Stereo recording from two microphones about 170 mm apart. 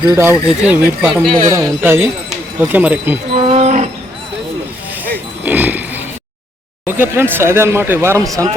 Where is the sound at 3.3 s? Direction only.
35° right (ahead or behind).